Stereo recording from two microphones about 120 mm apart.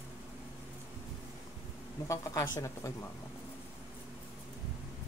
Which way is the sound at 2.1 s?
25° left (ahead or behind).